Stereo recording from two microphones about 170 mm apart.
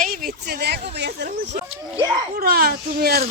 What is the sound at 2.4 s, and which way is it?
Speech, 65° right (ahead or behind).